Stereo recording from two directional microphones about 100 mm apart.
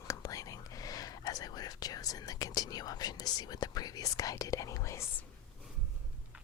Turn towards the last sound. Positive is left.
turn(degrees=30)  # may be behind; listen again after turning